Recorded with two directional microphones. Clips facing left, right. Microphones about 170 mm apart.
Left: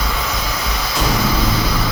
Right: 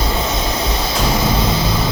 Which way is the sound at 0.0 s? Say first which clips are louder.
Right 4 dB; 25° right (ahead or behind).